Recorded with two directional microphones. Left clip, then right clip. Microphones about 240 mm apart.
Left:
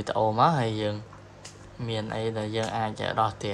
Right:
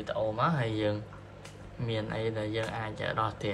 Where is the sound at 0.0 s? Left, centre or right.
Left.